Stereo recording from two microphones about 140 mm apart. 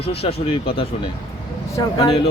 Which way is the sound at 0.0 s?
45° left (ahead or behind).